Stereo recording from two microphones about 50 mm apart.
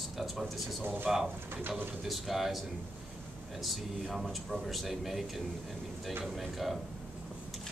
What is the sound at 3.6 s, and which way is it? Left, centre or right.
Speech, centre.